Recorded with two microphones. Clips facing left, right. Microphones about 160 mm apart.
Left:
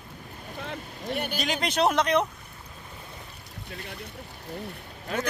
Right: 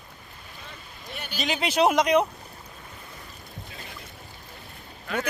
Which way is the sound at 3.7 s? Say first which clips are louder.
Left 7 dB; 60° left (ahead or behind).